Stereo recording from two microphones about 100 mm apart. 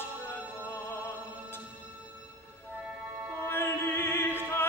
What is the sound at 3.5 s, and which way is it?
Music, 25° left (ahead or behind).